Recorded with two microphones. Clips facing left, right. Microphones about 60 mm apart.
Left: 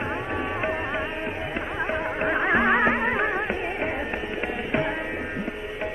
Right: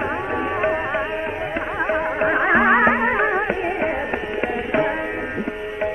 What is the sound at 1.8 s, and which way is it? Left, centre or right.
Music, right.